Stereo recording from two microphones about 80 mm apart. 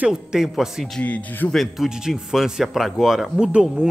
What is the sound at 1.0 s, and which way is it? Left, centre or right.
Speech, centre.